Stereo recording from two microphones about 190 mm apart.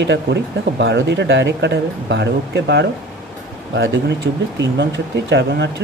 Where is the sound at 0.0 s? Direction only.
65° right (ahead or behind).